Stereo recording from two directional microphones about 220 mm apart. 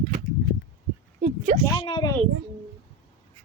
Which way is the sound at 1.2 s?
35° right (ahead or behind).